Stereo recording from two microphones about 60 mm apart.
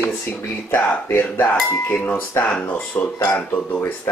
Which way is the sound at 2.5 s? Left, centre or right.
Left.